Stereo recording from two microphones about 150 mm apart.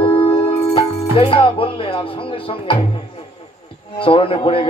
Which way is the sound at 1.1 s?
35° left (ahead or behind).